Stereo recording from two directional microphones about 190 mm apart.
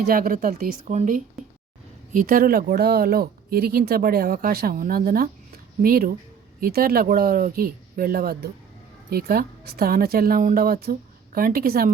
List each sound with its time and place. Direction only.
0.1 s speech: 50° right (ahead or behind)
0.9 s speech: 40° right (ahead or behind)
2.1 s speech: 50° right (ahead or behind)